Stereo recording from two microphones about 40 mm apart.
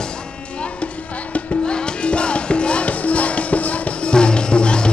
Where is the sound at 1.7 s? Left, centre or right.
Left.